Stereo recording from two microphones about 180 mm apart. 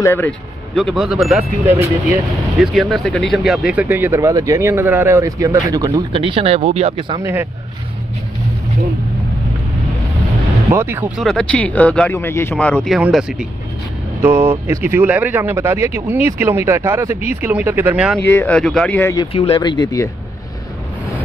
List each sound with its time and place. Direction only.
0.0 s speech: 15° left (ahead or behind)
0.7 s speech: centre (ahead or behind); by 7.2 s 25° right (ahead or behind)
10.7 s speech: 15° right (ahead or behind)
18.2 s speech: 10° left (ahead or behind)
19.3 s speech: 35° left (ahead or behind)